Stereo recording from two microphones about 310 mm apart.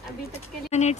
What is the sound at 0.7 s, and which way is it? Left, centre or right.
Speech, left.